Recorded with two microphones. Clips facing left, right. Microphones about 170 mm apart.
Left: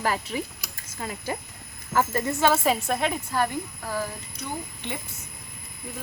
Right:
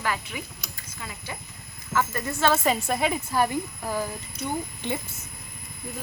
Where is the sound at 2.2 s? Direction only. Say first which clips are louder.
Right 1 dB; 15° left (ahead or behind).